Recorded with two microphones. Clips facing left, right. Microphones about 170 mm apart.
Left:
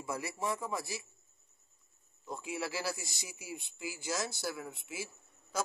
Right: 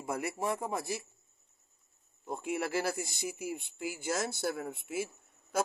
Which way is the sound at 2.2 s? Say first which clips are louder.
Right 4 dB; 55° right (ahead or behind).